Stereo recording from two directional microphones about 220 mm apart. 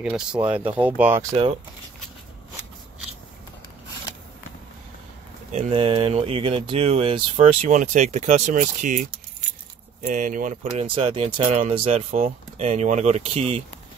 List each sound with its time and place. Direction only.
0.0 s speech: 5° right (ahead or behind)
1.3 s speech: 30° right (ahead or behind)
5.5 s speech: 30° right (ahead or behind)
10.0 s speech: 35° right (ahead or behind)